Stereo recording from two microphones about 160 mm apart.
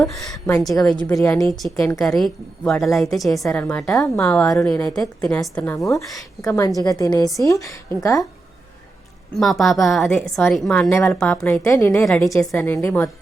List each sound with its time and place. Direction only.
0.0 s a woman's voice: 15° left (ahead or behind)
0.6 s a woman's voice: centre (ahead or behind)
1.4 s a woman's voice: centre (ahead or behind)
4.2 s a woman's voice: 15° left (ahead or behind)
6.7 s a woman's voice: 20° left (ahead or behind)
9.4 s a woman's voice: centre (ahead or behind)
11.6 s a woman's voice: 20° left (ahead or behind)
11.9 s a woman's voice: 5° left (ahead or behind)